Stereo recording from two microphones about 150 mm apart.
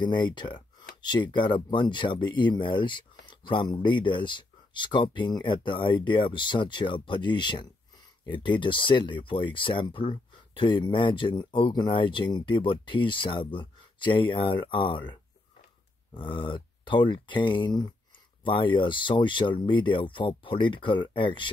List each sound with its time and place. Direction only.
0.0 s speech: 30° left (ahead or behind)
16.2 s speech: 35° left (ahead or behind)